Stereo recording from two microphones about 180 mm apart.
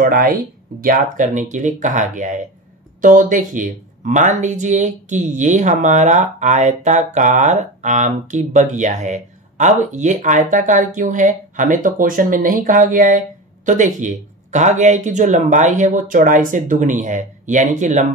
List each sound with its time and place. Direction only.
0.0 s speech: 50° right (ahead or behind)